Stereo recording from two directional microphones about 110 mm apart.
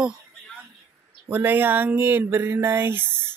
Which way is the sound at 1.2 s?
15° right (ahead or behind).